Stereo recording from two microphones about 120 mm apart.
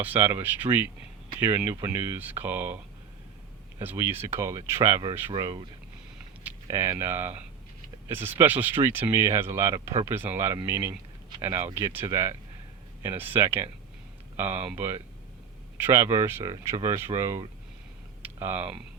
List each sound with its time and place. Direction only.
0.0 s speech: 15° right (ahead or behind)
3.8 s speech: 20° right (ahead or behind); by 5.6 s 35° right (ahead or behind)
6.7 s speech: 25° right (ahead or behind)
18.2 s typing: 15° right (ahead or behind)